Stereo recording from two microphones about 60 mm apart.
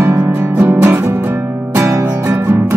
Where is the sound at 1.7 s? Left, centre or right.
Right.